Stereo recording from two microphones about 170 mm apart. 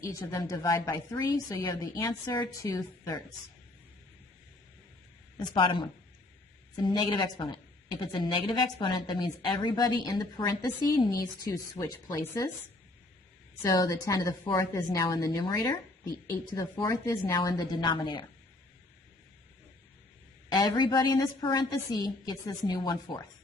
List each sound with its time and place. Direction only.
0.0 s a woman's voice: 15° left (ahead or behind)
6.8 s a woman's voice: 25° left (ahead or behind)
13.6 s a woman's voice: 20° left (ahead or behind)
20.5 s a woman's voice: 25° left (ahead or behind)